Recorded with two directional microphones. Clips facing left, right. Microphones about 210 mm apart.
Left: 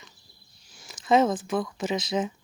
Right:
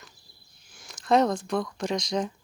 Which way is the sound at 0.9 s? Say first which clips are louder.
Left 1 dB; centre (ahead or behind).